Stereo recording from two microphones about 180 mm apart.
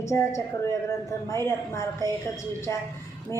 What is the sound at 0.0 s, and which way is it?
Speech, 15° left (ahead or behind).